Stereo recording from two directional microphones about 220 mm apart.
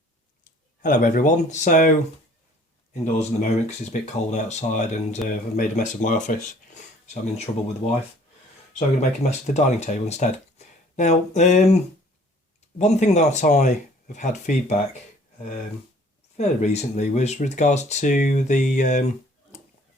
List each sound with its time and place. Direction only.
0.8 s speech: 35° left (ahead or behind)
2.9 s speech: 30° left (ahead or behind)
9.0 s speech: 30° left (ahead or behind)
12.8 s speech: 30° left (ahead or behind)
16.4 s speech: 30° left (ahead or behind)